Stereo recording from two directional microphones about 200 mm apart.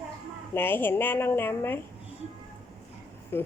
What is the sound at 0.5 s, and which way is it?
Speech, 10° left (ahead or behind).